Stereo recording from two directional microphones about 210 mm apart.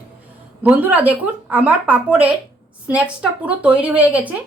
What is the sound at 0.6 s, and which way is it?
Speech, 5° right (ahead or behind).